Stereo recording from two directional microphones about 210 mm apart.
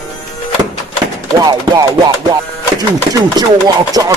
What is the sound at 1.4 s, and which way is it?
Music, 20° right (ahead or behind).